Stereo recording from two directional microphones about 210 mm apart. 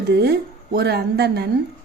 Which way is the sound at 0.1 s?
50° right (ahead or behind).